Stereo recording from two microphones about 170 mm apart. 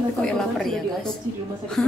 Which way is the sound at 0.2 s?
Centre (ahead or behind).